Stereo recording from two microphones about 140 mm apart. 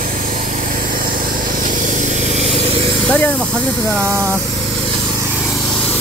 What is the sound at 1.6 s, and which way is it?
Vehicle, 65° right (ahead or behind).